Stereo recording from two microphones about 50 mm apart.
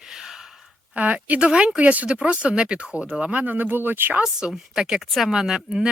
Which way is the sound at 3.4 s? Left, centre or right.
Right.